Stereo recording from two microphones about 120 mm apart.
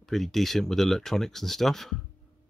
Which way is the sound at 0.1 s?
Centre (ahead or behind).